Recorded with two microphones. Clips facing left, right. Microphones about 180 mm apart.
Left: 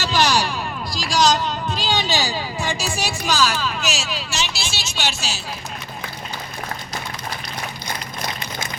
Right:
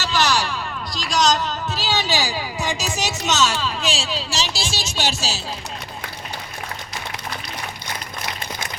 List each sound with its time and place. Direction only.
0.0 s a sound: 15° left (ahead or behind)
0.9 s music: centre (ahead or behind); by 4.5 s 35° right (ahead or behind)
4.9 s speech: 35° right (ahead or behind)